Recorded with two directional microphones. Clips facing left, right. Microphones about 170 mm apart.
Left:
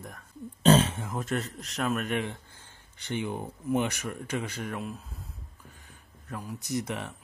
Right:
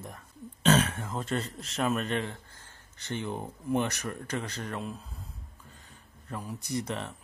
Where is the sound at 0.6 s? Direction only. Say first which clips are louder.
Left 3 dB; 30° left (ahead or behind).